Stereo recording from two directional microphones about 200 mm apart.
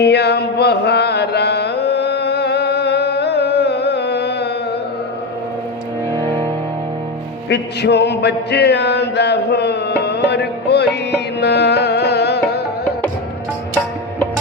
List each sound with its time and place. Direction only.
0.0 s music: 55° left (ahead or behind)
7.5 s chant: 55° left (ahead or behind)
11.3 s music: 55° left (ahead or behind)